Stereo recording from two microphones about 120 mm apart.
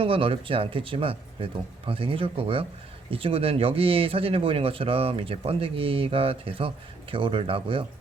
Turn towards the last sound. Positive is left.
turn(degrees=-50)  # may be behind; listen again after turning